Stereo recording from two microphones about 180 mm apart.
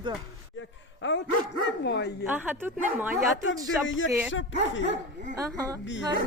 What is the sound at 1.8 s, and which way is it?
Speech, 70° left (ahead or behind).